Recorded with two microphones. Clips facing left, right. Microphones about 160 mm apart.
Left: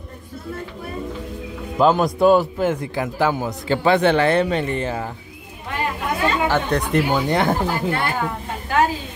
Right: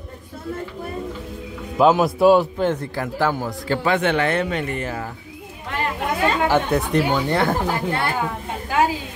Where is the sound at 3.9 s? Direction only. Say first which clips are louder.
Left 5 dB; 35° left (ahead or behind).